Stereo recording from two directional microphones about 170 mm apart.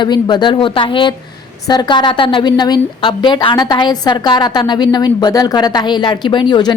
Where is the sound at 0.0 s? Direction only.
25° left (ahead or behind).